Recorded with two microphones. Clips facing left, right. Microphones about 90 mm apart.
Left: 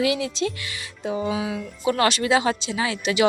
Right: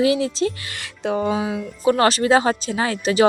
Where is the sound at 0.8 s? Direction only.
70° right (ahead or behind).